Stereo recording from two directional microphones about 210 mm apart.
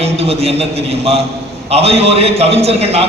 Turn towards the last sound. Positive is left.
turn(degrees=-30)  # may be behind; listen again after turning